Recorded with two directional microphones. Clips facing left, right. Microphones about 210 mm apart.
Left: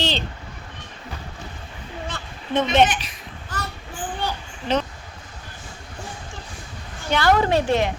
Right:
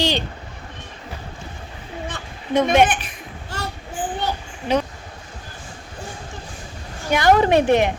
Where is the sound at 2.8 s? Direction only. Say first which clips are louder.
Right 1 dB; 55° right (ahead or behind).